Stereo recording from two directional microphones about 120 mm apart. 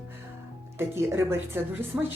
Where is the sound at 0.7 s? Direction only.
20° right (ahead or behind).